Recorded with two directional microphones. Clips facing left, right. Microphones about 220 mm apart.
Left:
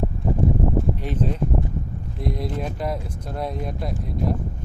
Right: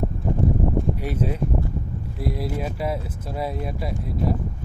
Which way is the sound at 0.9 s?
10° right (ahead or behind).